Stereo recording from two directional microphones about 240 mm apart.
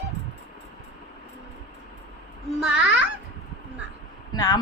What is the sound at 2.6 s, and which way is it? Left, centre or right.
Speech, centre.